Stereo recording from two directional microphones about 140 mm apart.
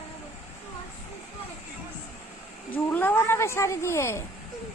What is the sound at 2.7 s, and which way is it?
Speech, 15° left (ahead or behind).